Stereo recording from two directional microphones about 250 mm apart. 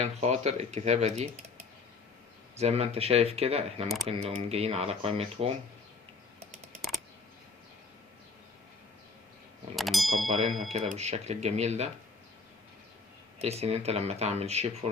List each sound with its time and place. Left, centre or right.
0.0 s speech: right
2.6 s speech: right
9.7 s ding: centre
10.2 s speech: right
13.4 s speech: right